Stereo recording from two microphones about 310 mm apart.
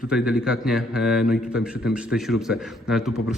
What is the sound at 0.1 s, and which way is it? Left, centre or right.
A man's voice, centre.